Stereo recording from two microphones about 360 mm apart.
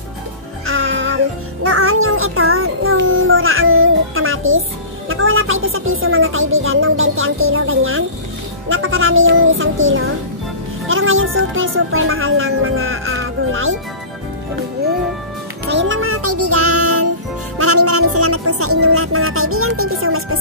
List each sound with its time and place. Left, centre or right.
0.7 s music: right
8.6 s speech: right
15.7 s music: right